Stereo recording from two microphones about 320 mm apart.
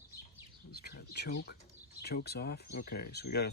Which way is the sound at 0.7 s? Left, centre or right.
Left.